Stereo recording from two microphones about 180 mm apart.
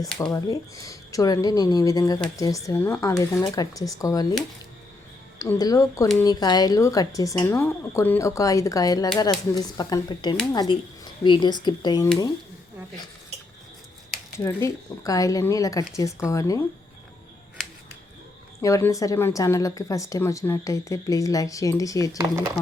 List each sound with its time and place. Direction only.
0.0 s speech: 5° left (ahead or behind)
0.3 s speech: 20° left (ahead or behind)
5.4 s speech: 20° left (ahead or behind)
14.3 s speech: 15° left (ahead or behind)
18.6 s speech: 15° left (ahead or behind)
22.2 s speech: 20° right (ahead or behind)